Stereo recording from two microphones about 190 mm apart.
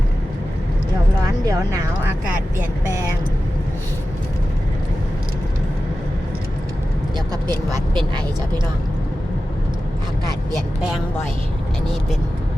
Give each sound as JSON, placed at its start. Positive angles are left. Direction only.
{"t": 1.5, "sound": "speech", "side_deg": -15}